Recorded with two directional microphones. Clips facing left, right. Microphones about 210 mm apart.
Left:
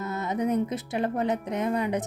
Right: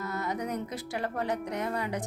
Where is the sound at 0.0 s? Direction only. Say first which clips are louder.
Left 5 dB; 20° left (ahead or behind).